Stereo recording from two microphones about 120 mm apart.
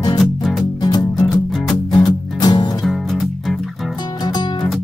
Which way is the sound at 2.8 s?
Centre (ahead or behind).